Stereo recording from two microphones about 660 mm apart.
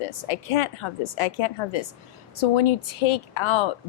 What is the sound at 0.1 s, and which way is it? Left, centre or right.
A woman's voice, left.